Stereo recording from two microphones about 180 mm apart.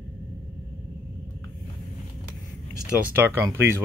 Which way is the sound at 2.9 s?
10° right (ahead or behind).